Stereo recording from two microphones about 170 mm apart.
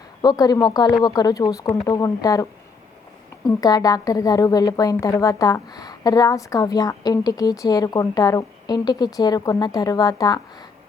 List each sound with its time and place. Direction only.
0.2 s a woman's voice: 20° left (ahead or behind)